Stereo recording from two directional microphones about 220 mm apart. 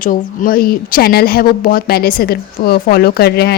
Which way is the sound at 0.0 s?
40° left (ahead or behind).